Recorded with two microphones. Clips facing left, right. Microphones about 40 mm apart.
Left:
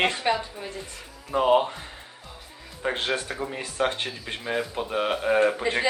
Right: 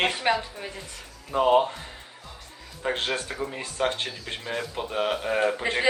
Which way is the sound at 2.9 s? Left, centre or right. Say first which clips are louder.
Left 1 dB; left.